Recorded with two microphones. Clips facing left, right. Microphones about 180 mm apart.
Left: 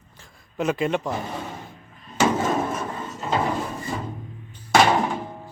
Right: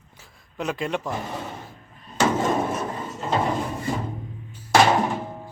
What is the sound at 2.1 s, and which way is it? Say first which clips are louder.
Hammer: even; 5° left (ahead or behind).